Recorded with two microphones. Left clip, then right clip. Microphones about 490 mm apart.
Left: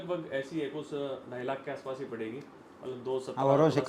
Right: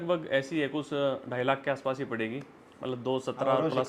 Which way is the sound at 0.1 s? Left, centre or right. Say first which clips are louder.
Right 6 dB; right.